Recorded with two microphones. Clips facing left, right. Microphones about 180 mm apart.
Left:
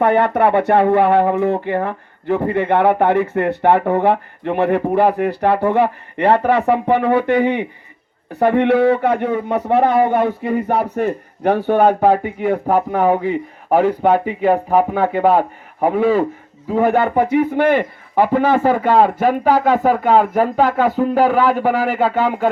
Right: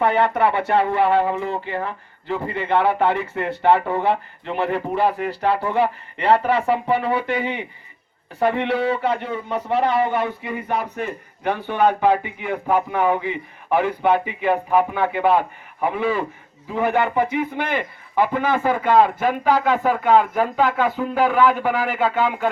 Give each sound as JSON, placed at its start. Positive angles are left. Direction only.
{"t": 0.0, "sound": "a man's voice", "side_deg": 50}